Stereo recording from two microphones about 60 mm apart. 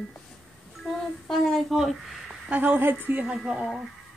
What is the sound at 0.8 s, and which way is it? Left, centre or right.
Speech, centre.